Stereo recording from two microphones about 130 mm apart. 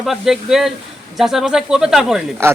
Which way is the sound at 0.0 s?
Centre (ahead or behind).